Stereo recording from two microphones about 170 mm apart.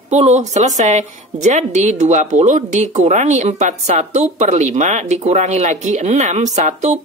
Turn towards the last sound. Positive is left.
turn(degrees=-45)  # may be behind; listen again after turning